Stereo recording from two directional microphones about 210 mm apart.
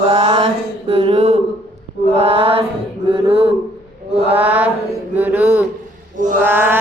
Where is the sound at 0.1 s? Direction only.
30° right (ahead or behind).